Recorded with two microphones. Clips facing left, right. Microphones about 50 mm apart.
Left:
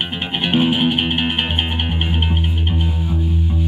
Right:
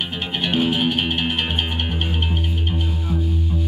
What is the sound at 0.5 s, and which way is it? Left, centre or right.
Music, centre.